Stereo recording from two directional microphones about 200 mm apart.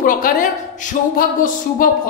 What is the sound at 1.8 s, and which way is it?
Speech, 45° left (ahead or behind).